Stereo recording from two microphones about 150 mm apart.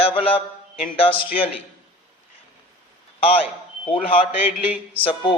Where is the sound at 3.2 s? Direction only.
40° left (ahead or behind).